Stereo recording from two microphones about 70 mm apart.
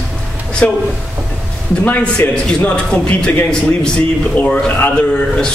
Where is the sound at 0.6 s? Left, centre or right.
Left.